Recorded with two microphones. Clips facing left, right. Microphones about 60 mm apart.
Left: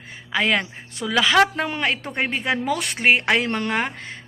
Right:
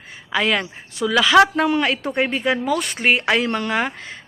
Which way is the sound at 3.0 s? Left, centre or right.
Left.